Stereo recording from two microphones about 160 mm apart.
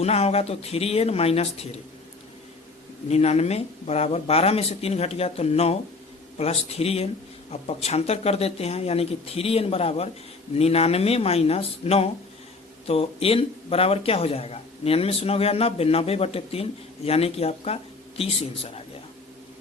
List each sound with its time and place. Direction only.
0.0 s speech: 40° left (ahead or behind)
3.1 s speech: 40° left (ahead or behind)